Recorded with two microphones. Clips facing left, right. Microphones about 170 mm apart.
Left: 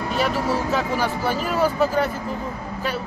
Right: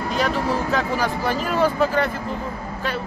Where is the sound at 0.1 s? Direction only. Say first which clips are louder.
Even; 5° left (ahead or behind).